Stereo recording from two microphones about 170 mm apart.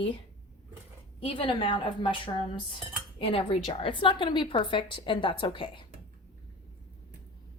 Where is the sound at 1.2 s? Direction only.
30° left (ahead or behind).